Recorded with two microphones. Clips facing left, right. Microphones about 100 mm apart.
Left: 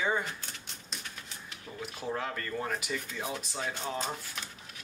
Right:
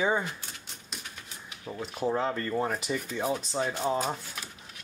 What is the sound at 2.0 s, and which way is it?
Speech, 30° right (ahead or behind).